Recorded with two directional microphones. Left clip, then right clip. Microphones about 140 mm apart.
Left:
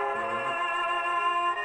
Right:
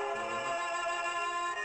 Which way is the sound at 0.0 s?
20° right (ahead or behind).